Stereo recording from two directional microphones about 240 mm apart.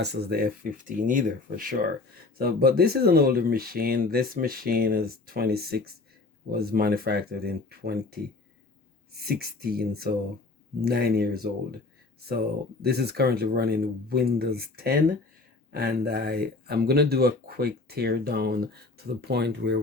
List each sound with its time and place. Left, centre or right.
0.0 s speech: right
9.2 s speech: right
12.8 s speech: right